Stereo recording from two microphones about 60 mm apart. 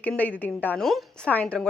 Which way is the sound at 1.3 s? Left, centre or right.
Left.